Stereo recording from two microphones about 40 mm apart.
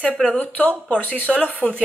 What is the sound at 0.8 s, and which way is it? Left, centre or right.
Speech, left.